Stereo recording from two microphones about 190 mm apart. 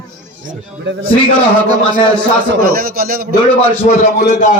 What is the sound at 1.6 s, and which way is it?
Speech, 20° right (ahead or behind).